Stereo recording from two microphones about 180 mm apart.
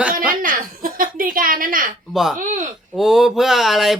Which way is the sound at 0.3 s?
50° right (ahead or behind).